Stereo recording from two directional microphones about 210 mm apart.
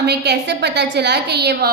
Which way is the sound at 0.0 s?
50° right (ahead or behind).